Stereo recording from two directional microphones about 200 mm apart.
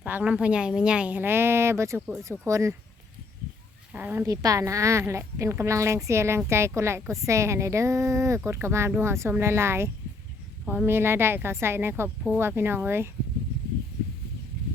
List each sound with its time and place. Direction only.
0.0 s a woman's voice: 10° right (ahead or behind)
3.9 s a woman's voice: 10° right (ahead or behind)